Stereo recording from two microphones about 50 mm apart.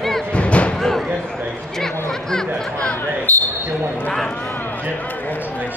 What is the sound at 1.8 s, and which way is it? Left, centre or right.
Chatter, centre.